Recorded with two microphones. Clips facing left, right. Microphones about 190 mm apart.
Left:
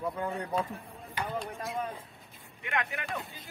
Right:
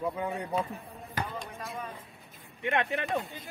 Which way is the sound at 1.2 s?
45° right (ahead or behind).